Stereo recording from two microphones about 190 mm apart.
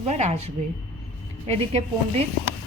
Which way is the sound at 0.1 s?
35° right (ahead or behind).